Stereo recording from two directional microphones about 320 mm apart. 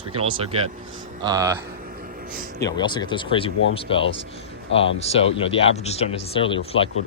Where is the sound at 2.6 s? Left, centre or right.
Centre.